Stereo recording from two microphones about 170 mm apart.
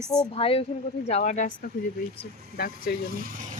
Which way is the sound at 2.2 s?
60° left (ahead or behind).